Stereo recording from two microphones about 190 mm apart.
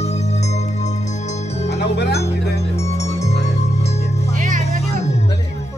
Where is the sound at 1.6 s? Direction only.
65° left (ahead or behind).